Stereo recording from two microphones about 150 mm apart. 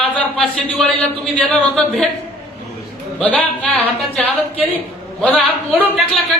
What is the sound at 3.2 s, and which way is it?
Speech, 10° left (ahead or behind).